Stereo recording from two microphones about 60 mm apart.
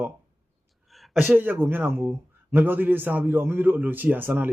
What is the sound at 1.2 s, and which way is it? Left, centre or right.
A man's voice, right.